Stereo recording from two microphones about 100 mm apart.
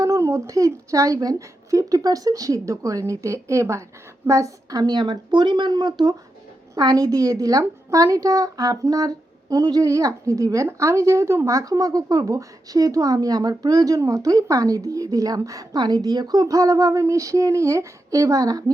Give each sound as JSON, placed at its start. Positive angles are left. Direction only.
{"t": 0.0, "sound": "a woman's voice", "side_deg": -30}